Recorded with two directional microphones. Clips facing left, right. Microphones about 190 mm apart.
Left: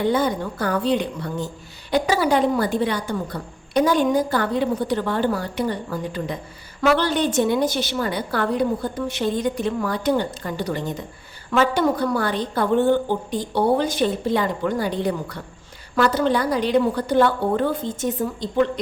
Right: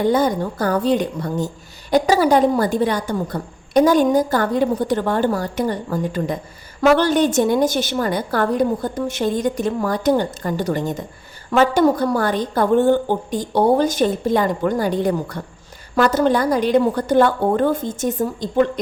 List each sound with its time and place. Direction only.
0.0 s a woman's voice: 40° right (ahead or behind)